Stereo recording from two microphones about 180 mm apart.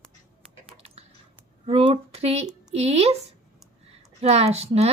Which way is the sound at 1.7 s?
30° right (ahead or behind).